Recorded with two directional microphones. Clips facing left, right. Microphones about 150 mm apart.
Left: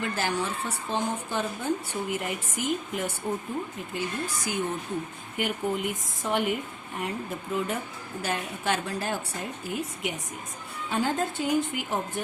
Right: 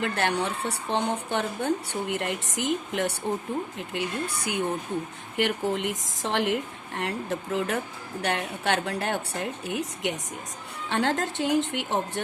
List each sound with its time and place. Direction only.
0.0 s speech: 65° right (ahead or behind)
5.4 s speech: 90° right
8.2 s a woman's voice: 70° right (ahead or behind)